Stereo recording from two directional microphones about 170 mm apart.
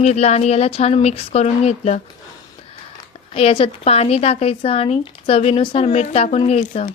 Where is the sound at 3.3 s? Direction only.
35° left (ahead or behind).